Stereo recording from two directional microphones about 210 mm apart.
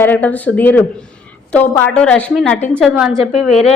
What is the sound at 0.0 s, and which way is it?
A woman's voice, 10° left (ahead or behind).